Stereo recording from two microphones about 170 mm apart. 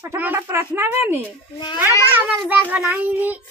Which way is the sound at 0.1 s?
15° right (ahead or behind).